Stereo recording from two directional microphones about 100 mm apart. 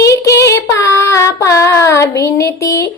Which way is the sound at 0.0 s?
30° left (ahead or behind).